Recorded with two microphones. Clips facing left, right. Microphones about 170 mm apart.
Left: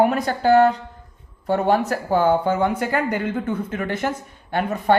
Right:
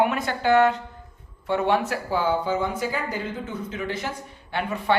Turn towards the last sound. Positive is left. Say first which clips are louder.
# left 5 dB
turn(degrees=45)  # may be behind; listen again after turning